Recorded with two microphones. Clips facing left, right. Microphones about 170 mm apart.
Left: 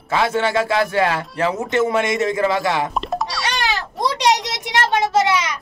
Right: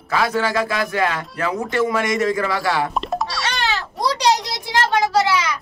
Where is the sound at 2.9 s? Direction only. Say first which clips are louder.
Even; centre (ahead or behind).